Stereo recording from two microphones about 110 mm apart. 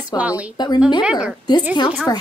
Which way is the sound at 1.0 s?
10° right (ahead or behind).